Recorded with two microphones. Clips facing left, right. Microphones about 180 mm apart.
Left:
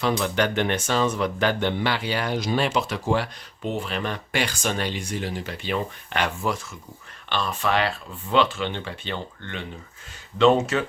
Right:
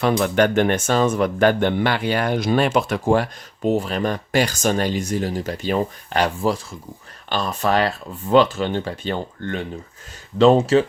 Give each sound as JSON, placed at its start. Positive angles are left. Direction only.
{"t": 0.0, "sound": "speech", "side_deg": -50}